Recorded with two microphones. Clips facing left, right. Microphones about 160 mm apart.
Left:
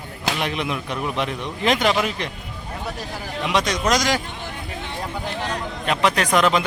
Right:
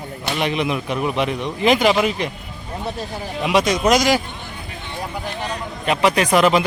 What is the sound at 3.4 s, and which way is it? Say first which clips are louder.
Speech: right 5 dB; 10° right (ahead or behind).